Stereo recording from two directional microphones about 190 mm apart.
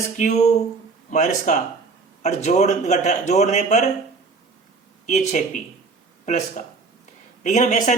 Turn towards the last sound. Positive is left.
turn(degrees=40)  # may be behind; listen again after turning